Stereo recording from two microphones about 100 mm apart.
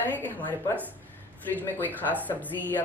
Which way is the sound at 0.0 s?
20° left (ahead or behind).